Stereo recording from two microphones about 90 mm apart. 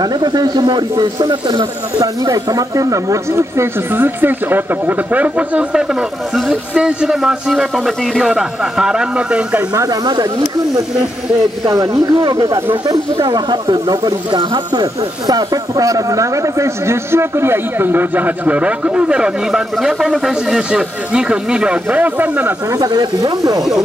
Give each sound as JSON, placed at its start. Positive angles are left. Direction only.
{"t": 0.0, "sound": "a man's voice", "side_deg": -50}
{"t": 2.2, "sound": "speech", "side_deg": -40}
{"t": 9.8, "sound": "a man's voice", "side_deg": -50}
{"t": 11.7, "sound": "speech", "side_deg": -40}
{"t": 12.8, "sound": "speech", "side_deg": -60}
{"t": 22.7, "sound": "a man's voice", "side_deg": -45}